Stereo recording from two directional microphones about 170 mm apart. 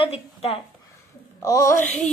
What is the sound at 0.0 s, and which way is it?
Speech, 35° left (ahead or behind).